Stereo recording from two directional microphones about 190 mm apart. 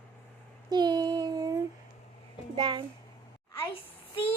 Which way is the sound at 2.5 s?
25° right (ahead or behind).